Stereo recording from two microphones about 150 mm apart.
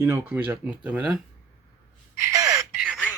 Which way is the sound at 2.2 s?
20° right (ahead or behind).